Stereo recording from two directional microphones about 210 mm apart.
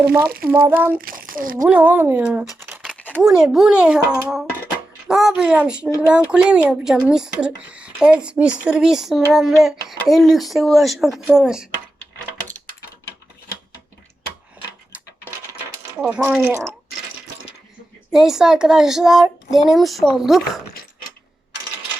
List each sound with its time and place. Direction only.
0.2 s speech: 50° right (ahead or behind)
0.4 s speech: 10° right (ahead or behind)
0.9 s a child's voice: 45° right (ahead or behind)
1.6 s speech: 5° right (ahead or behind)
2.6 s scratch: 10° right (ahead or behind)
2.9 s a sound: 10° left (ahead or behind)
3.2 s speech: centre (ahead or behind)
16.0 s speech: 5° right (ahead or behind)
18.1 s speech: centre (ahead or behind)